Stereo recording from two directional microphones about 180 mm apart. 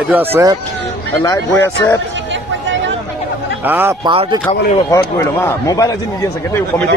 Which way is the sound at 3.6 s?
10° right (ahead or behind).